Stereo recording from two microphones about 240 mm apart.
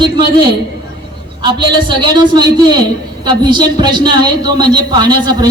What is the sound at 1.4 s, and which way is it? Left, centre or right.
A man's voice, centre.